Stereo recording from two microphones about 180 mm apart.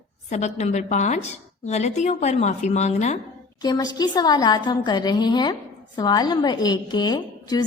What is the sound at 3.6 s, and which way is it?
A woman's voice, 20° left (ahead or behind).